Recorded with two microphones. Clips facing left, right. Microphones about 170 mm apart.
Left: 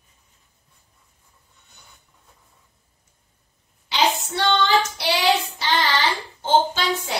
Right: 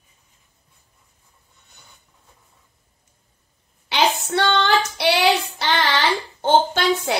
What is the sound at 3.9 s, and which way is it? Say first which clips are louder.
Child singing: right 2 dB; 60° right (ahead or behind).